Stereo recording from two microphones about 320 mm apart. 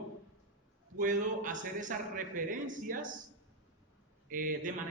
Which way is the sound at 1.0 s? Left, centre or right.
Right.